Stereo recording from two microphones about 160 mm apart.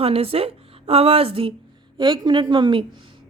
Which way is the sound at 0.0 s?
35° right (ahead or behind).